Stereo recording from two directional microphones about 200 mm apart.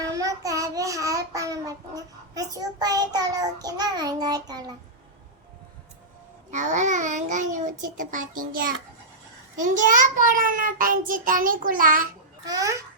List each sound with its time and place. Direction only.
0.0 s child singing: 15° right (ahead or behind)
6.5 s a child's voice: 35° right (ahead or behind)
9.8 s child singing: 40° right (ahead or behind)
12.5 s a child's voice: 15° right (ahead or behind)